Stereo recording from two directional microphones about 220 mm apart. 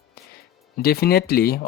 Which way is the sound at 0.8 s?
45° left (ahead or behind).